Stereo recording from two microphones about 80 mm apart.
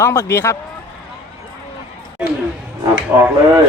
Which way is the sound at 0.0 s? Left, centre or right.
Left.